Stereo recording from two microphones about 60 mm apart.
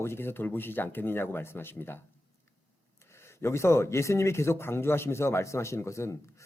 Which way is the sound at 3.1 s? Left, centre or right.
Left.